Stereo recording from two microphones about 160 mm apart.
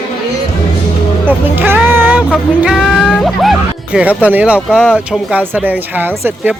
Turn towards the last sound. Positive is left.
turn(degrees=-15)  # may be behind; listen again after turning